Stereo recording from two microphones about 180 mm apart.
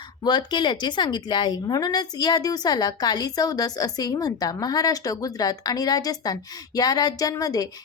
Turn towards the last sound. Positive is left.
turn(degrees=20)  # may be behind; listen again after turning